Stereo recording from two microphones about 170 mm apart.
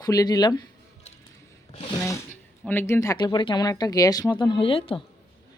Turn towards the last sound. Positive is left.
turn(degrees=30)  # may be behind; listen again after turning